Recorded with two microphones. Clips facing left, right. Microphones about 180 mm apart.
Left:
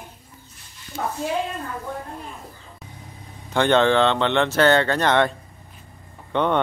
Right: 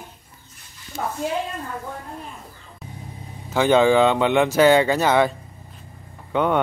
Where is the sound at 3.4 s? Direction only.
5° right (ahead or behind).